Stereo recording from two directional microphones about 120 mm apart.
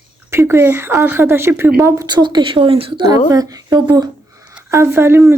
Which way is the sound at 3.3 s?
30° right (ahead or behind).